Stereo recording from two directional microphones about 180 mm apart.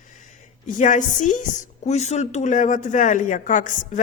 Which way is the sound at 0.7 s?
45° left (ahead or behind).